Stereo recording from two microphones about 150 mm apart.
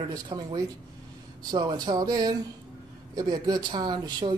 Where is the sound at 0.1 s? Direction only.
30° right (ahead or behind).